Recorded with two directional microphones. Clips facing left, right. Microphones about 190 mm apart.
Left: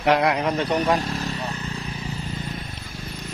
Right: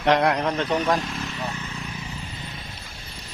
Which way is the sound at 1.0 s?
35° left (ahead or behind).